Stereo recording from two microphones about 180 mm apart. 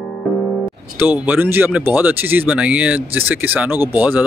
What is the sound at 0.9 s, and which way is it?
Speech, 10° right (ahead or behind).